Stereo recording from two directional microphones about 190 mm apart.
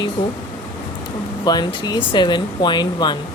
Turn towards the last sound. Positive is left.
turn(degrees=20)  # may be behind; listen again after turning